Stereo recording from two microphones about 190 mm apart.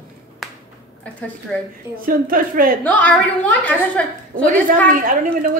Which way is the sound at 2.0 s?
50° right (ahead or behind).